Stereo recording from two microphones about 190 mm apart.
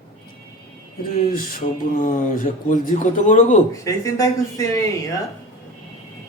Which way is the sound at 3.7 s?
15° left (ahead or behind).